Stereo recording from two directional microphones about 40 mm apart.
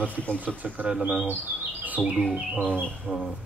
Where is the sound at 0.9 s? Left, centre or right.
Right.